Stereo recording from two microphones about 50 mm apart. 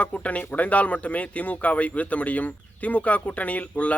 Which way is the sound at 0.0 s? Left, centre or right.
Left.